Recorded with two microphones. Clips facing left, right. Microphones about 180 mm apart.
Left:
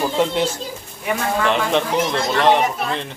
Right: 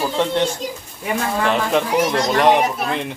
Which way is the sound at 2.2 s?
15° right (ahead or behind).